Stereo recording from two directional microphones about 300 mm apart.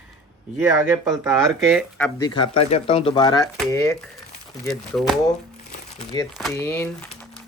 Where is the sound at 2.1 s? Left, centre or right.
Centre.